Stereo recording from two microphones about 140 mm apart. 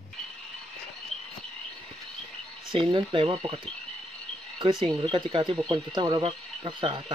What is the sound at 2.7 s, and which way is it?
Speech, 35° right (ahead or behind).